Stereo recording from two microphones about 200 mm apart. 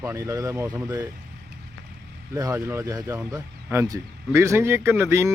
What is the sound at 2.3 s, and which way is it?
Speech, 15° right (ahead or behind).